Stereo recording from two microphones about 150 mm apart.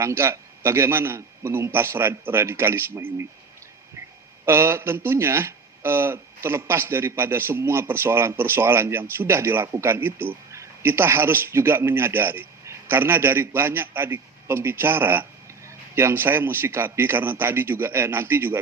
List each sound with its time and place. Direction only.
0.0 s speech: 15° right (ahead or behind)
4.4 s speech: 15° right (ahead or behind)